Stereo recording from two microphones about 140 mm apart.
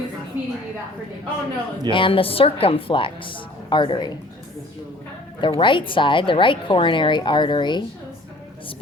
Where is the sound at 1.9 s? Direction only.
35° left (ahead or behind).